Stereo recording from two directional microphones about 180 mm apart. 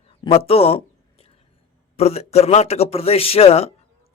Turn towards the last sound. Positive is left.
turn(degrees=35)  # may be behind; listen again after turning